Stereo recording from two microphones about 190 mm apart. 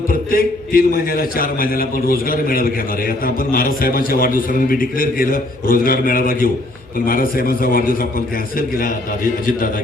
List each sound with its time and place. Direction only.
0.1 s a man's voice: 50° left (ahead or behind)